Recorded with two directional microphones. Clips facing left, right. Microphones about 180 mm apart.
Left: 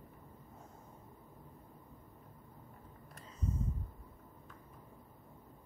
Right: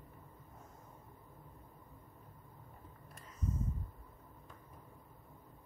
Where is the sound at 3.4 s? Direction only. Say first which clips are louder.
Left 1 dB; 30° left (ahead or behind).